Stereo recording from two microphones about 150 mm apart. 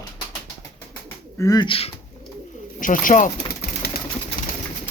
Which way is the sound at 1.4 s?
25° left (ahead or behind).